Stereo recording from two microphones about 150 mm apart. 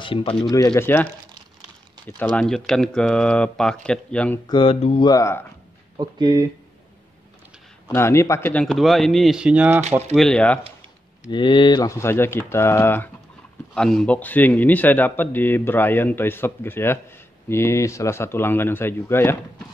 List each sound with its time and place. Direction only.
0.0 s speech: 35° left (ahead or behind)
2.0 s speech: 10° left (ahead or behind)
4.5 s speech: 35° left (ahead or behind)
5.1 s speech: 20° left (ahead or behind)
5.9 s speech: 30° right (ahead or behind)
7.9 s speech: 20° left (ahead or behind)
8.6 s speech: centre (ahead or behind)
10.1 s speech: 5° left (ahead or behind)
11.2 s speech: 30° left (ahead or behind); by 13.1 s 15° left (ahead or behind)
13.7 s speech: 5° left (ahead or behind)